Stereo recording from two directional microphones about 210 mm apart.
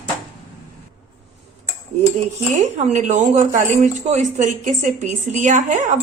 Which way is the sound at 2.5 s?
35° right (ahead or behind).